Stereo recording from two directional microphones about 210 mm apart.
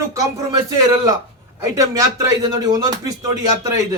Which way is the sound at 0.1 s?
15° right (ahead or behind).